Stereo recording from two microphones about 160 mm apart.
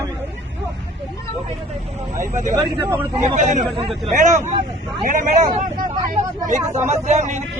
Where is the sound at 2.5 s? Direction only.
20° right (ahead or behind).